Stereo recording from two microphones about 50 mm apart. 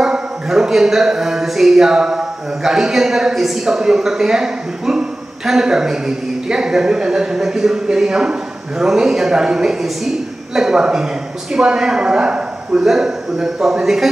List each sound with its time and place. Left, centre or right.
0.0 s speech: centre